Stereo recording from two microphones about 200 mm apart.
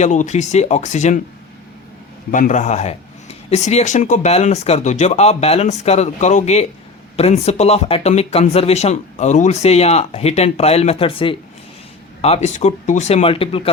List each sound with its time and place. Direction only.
0.0 s speech: 35° left (ahead or behind)
2.3 s speech: 40° left (ahead or behind)